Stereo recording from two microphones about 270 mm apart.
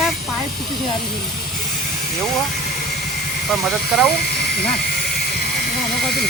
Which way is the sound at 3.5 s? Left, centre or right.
Centre.